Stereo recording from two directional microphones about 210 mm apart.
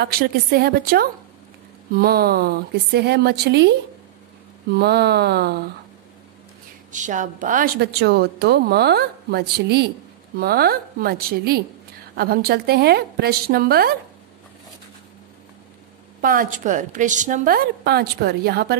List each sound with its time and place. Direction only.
0.0 s a woman's voice: 50° right (ahead or behind)
4.7 s a woman's voice: 50° right (ahead or behind)
6.9 s a woman's voice: 35° right (ahead or behind)
16.2 s a woman's voice: 40° right (ahead or behind)